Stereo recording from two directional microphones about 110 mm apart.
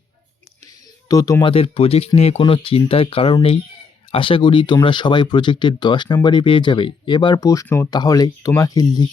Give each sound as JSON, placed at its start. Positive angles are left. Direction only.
{"t": 1.0, "sound": "speech", "side_deg": 30}
{"t": 1.4, "sound": "speech", "side_deg": 55}
{"t": 2.4, "sound": "speech", "side_deg": 55}
{"t": 7.9, "sound": "speech", "side_deg": 35}